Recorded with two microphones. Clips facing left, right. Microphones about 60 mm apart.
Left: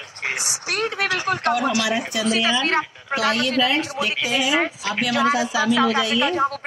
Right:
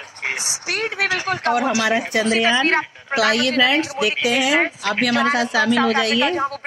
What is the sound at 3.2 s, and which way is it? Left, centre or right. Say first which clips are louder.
A woman's voice: right 3 dB; right.